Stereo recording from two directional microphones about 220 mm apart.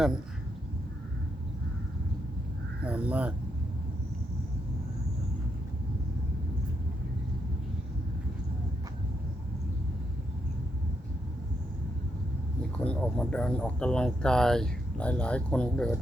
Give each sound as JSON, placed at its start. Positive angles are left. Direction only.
{"t": 2.8, "sound": "speech", "side_deg": -5}
{"t": 12.7, "sound": "speech", "side_deg": 5}